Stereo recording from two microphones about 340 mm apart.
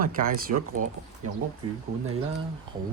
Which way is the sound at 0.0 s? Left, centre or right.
Right.